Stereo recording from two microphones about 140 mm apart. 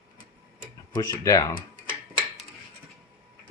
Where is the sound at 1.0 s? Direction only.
25° left (ahead or behind).